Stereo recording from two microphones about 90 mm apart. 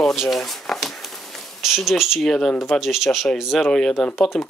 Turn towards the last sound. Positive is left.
turn(degrees=0)  # may be behind; listen again after turning